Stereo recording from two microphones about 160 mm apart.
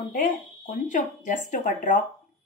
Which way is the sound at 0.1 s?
55° left (ahead or behind).